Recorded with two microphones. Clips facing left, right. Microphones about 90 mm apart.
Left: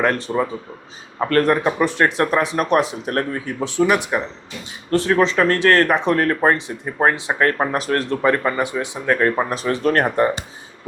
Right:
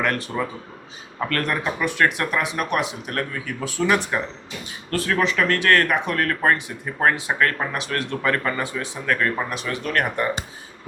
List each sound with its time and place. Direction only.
0.0 s speech: 25° left (ahead or behind)
4.9 s speech: 30° left (ahead or behind)
8.2 s speech: 20° left (ahead or behind)